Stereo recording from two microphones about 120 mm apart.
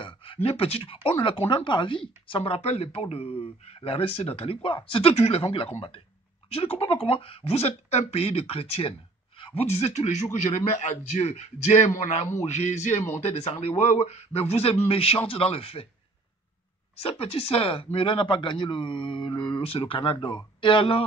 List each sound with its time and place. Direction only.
0.0 s a sound: 45° left (ahead or behind)
1.2 s a man's voice: 45° left (ahead or behind)
17.0 s speech: 55° left (ahead or behind)
19.6 s speech: 50° left (ahead or behind)